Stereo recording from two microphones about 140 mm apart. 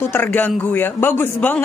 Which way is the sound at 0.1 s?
15° left (ahead or behind).